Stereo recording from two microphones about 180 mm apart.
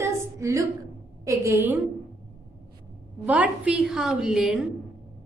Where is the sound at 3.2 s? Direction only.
10° right (ahead or behind).